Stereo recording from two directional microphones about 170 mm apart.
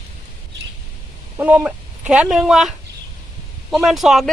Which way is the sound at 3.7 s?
Centre (ahead or behind).